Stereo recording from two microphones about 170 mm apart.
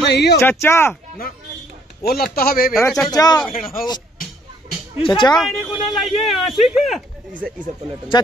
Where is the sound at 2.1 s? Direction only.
60° left (ahead or behind).